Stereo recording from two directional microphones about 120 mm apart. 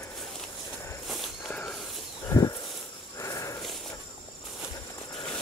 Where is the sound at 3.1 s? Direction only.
25° left (ahead or behind).